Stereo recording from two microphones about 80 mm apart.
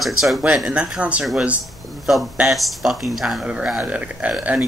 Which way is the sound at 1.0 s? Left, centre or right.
Centre.